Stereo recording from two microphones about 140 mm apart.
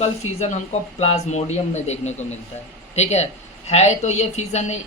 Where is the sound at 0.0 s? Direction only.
55° left (ahead or behind).